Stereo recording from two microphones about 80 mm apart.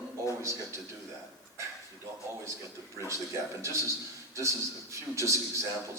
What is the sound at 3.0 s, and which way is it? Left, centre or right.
A man's voice, right.